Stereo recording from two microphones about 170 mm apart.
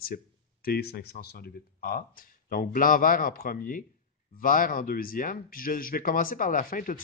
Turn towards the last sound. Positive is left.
turn(degrees=50)  # may be behind; listen again after turning